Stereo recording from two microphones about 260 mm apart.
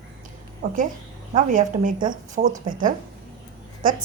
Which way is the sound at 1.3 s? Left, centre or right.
Right.